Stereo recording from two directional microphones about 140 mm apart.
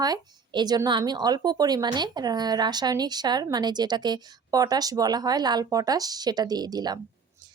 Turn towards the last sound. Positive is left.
turn(degrees=-30)  # may be behind; listen again after turning